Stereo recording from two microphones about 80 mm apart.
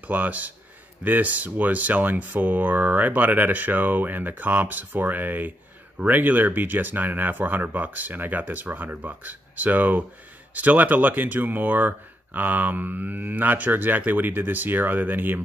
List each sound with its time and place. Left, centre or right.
0.0 s speech: centre